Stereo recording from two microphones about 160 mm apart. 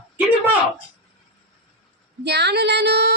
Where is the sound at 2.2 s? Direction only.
90° right.